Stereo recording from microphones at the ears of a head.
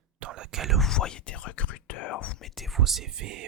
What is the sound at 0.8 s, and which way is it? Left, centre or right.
Whispering, left.